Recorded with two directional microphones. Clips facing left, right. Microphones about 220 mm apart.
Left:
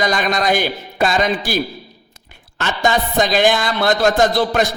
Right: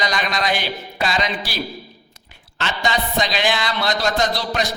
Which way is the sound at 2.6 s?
50° left (ahead or behind).